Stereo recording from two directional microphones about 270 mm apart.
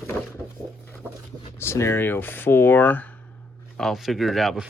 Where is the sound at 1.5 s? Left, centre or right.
Centre.